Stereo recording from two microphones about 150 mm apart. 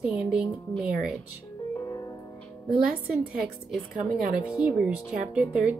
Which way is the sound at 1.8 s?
20° left (ahead or behind).